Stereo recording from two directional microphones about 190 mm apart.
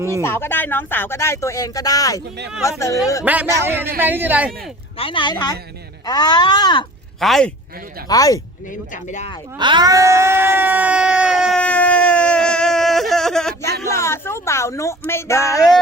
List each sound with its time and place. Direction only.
0.2 s speech: 10° left (ahead or behind)
3.3 s speech: 10° right (ahead or behind)
4.9 s speech: 25° left (ahead or behind)
7.2 s speech: centre (ahead or behind)
8.0 s speech: 20° left (ahead or behind)
8.7 s speech: 40° left (ahead or behind)
9.6 s speech: 25° right (ahead or behind); by 11.6 s 5° right (ahead or behind)
11.6 s a sound: 5° left (ahead or behind)
13.8 s speech: 15° left (ahead or behind)